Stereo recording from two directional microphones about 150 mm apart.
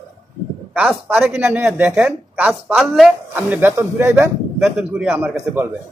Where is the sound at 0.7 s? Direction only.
10° right (ahead or behind).